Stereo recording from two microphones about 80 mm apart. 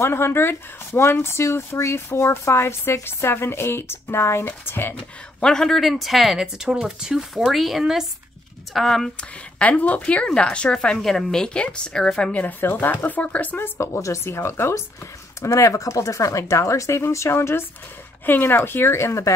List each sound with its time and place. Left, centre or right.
0.0 s speech: left
5.4 s speech: centre
9.6 s a woman's voice: centre
13.7 s speech: left